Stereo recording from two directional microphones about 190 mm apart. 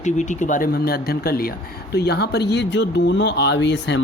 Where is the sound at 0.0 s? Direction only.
40° left (ahead or behind).